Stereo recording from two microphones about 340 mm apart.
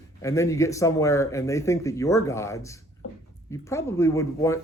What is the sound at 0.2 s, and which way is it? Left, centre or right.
Speech, centre.